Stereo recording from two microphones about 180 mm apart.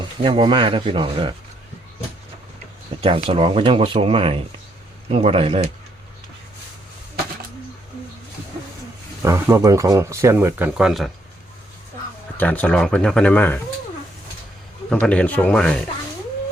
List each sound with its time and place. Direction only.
0.2 s speech: 30° right (ahead or behind)
3.0 s speech: 30° right (ahead or behind)
9.2 s speech: 15° right (ahead or behind)
12.4 s speech: 10° left (ahead or behind)
14.8 s speech: 5° left (ahead or behind)